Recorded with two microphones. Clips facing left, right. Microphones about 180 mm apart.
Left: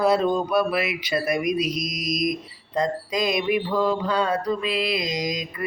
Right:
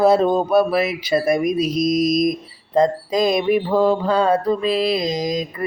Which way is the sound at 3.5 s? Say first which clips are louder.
Right 5 dB; 30° right (ahead or behind).